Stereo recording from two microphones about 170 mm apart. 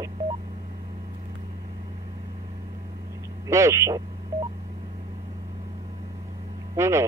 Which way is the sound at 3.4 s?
20° right (ahead or behind).